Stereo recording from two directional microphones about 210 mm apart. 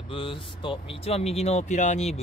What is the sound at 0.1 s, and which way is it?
Speech, 25° left (ahead or behind).